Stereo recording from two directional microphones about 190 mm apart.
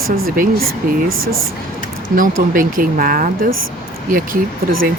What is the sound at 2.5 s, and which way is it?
Speech, 45° right (ahead or behind).